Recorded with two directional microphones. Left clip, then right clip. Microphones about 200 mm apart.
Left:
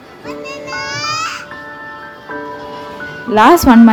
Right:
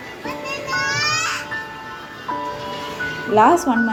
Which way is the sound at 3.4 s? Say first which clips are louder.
Left 6 dB; 30° left (ahead or behind).